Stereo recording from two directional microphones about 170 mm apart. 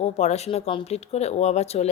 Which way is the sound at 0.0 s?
40° left (ahead or behind).